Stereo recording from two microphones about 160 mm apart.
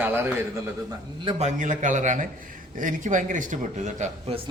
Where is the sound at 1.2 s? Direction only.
40° right (ahead or behind).